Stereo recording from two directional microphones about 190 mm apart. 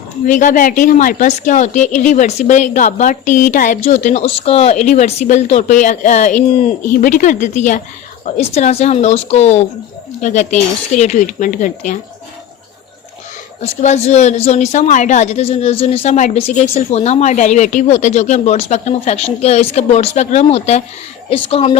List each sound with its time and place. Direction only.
0.3 s a woman's voice: 45° left (ahead or behind)
13.6 s a woman's voice: 35° left (ahead or behind)